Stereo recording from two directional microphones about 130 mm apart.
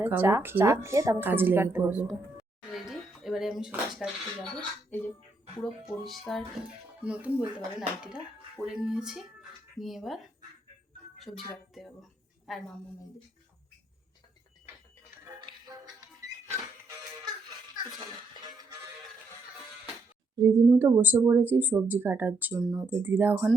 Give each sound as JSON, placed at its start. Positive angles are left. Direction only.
{"t": 0.0, "sound": "a woman's voice", "side_deg": -15}
{"t": 2.7, "sound": "a sound", "side_deg": 0}
{"t": 3.7, "sound": "speech", "side_deg": -5}
{"t": 5.8, "sound": "speech", "side_deg": 0}
{"t": 7.0, "sound": "a woman's voice", "side_deg": -10}
{"t": 15.4, "sound": "music", "side_deg": -35}
{"t": 18.4, "sound": "music", "side_deg": -30}
{"t": 20.3, "sound": "a woman's voice", "side_deg": -25}